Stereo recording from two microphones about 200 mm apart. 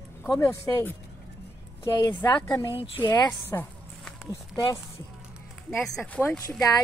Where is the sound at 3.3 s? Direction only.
10° left (ahead or behind).